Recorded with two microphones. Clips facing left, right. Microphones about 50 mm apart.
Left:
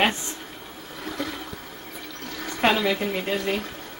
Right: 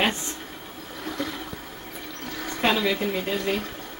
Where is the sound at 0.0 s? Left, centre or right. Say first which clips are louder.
Left 2 dB; centre.